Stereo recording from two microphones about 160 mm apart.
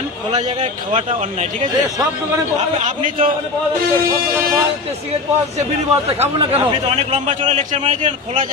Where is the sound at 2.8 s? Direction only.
55° right (ahead or behind).